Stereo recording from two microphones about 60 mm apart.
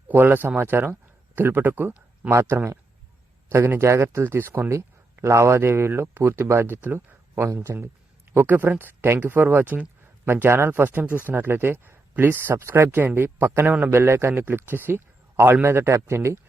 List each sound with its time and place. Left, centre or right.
0.1 s speech: right
2.3 s speech: right
3.8 s speech: right
7.5 s speech: right
8.4 s speech: right
12.9 s speech: right